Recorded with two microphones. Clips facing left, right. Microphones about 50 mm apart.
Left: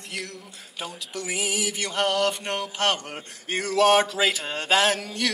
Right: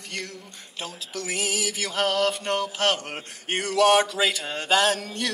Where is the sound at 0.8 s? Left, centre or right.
Centre.